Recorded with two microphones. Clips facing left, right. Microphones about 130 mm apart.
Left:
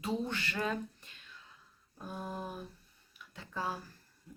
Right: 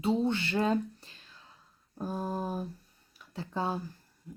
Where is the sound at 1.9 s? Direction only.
35° right (ahead or behind).